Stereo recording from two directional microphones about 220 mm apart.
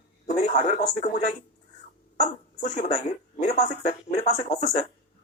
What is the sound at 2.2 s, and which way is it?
Speech, 30° left (ahead or behind).